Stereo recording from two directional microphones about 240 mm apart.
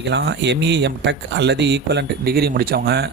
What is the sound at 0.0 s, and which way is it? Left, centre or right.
Speech, right.